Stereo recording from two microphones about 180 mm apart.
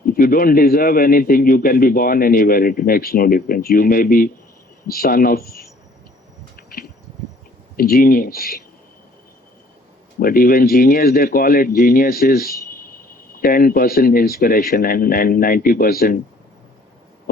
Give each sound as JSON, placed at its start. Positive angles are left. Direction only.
{"t": 0.0, "sound": "a man's voice", "side_deg": 55}
{"t": 6.6, "sound": "a sound", "side_deg": 55}
{"t": 7.8, "sound": "speech", "side_deg": 55}
{"t": 10.2, "sound": "speech", "side_deg": 55}